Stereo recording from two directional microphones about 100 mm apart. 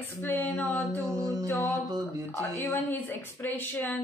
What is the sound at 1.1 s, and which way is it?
Speech, 35° right (ahead or behind).